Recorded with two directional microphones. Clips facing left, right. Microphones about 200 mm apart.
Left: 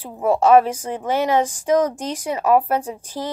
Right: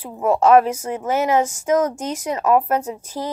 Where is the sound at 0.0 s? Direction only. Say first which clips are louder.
Even; 30° left (ahead or behind).